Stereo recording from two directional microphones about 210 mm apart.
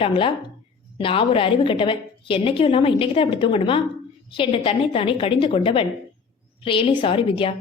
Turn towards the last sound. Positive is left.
turn(degrees=25)  # may be behind; listen again after turning